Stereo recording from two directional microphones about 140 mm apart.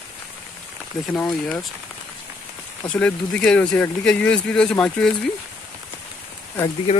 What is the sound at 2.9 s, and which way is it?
Speech, 5° left (ahead or behind).